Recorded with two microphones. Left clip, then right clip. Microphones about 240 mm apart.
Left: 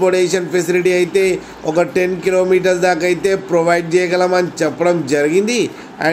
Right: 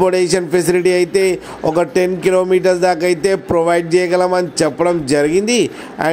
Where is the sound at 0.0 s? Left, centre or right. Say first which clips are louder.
Even; right.